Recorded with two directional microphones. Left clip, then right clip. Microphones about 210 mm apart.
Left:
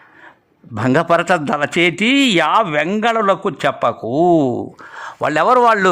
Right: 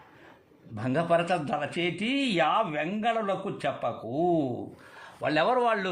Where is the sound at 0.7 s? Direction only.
40° left (ahead or behind).